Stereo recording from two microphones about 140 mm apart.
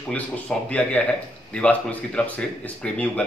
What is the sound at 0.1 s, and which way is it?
A man's voice, 10° left (ahead or behind).